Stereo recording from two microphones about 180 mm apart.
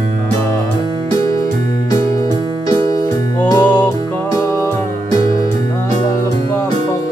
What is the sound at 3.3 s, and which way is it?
Music, 10° left (ahead or behind).